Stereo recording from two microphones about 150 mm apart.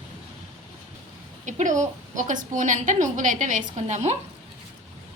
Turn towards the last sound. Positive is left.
turn(degrees=-50)  # may be behind; listen again after turning